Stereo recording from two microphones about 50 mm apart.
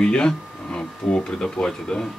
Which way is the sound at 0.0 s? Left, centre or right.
Centre.